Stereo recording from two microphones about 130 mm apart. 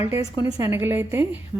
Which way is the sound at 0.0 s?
25° right (ahead or behind).